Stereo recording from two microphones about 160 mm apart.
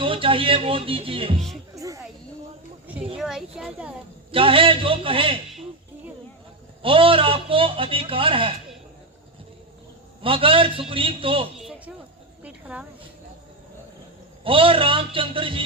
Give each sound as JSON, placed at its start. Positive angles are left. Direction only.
{"t": 0.0, "sound": "speech", "side_deg": -35}
{"t": 1.7, "sound": "music", "side_deg": -20}
{"t": 3.2, "sound": "a child's voice", "side_deg": -5}
{"t": 4.3, "sound": "a man's voice", "side_deg": -35}
{"t": 6.8, "sound": "a man's voice", "side_deg": -35}
{"t": 10.2, "sound": "a man's voice", "side_deg": -35}
{"t": 12.4, "sound": "a sound", "side_deg": -10}
{"t": 14.4, "sound": "a man's voice", "side_deg": -35}